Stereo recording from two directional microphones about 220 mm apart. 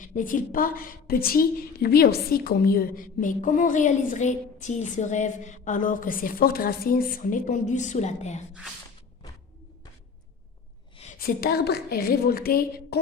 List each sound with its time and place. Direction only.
0.0 s a woman's voice: 35° left (ahead or behind)
10.9 s a woman's voice: 35° left (ahead or behind)